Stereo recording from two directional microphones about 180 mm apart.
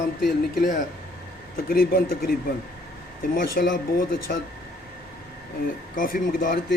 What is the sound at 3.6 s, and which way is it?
Speech, 55° left (ahead or behind).